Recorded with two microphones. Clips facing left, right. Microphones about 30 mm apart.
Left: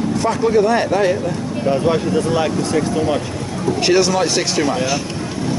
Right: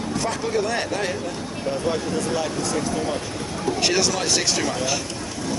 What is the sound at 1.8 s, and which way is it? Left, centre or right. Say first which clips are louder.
Speech: left 7 dB; left.